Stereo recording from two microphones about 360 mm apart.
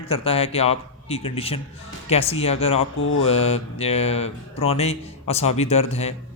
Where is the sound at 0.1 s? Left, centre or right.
Centre.